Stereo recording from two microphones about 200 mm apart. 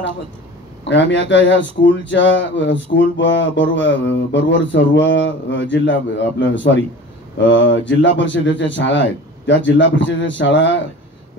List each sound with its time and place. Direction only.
0.8 s speech: 65° left (ahead or behind)